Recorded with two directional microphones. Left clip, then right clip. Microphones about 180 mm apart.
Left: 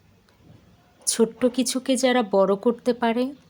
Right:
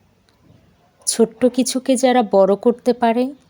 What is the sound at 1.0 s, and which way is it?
Speech, 20° right (ahead or behind).